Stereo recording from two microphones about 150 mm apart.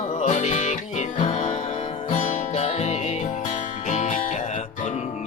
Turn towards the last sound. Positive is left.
turn(degrees=55)  # may be behind; listen again after turning